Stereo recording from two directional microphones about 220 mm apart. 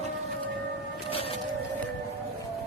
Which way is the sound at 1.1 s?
25° left (ahead or behind).